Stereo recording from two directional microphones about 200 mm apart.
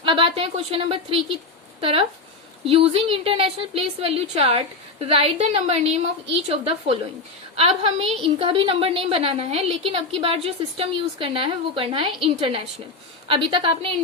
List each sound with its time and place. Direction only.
0.0 s a woman's voice: 25° right (ahead or behind)